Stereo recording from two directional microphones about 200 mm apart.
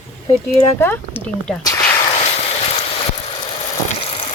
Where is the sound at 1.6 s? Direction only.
15° left (ahead or behind).